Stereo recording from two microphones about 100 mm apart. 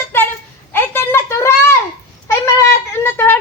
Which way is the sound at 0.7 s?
20° left (ahead or behind).